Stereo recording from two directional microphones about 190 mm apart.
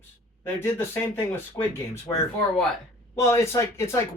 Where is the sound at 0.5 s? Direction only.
10° left (ahead or behind).